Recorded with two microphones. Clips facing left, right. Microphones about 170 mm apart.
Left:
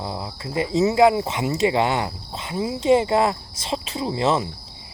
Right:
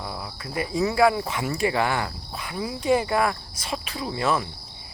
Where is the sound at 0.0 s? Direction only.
25° left (ahead or behind).